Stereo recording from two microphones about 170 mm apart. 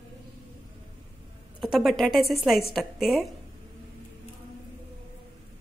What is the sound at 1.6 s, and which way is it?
A woman's voice, centre (ahead or behind).